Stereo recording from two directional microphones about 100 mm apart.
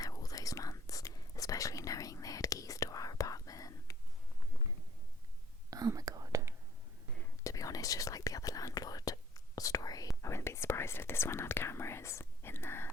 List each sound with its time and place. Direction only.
0.0 s whispering: 35° left (ahead or behind)
5.7 s whispering: 35° right (ahead or behind)
7.4 s whispering: 35° left (ahead or behind)